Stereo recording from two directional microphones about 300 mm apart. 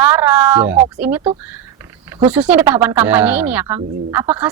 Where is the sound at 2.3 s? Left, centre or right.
Centre.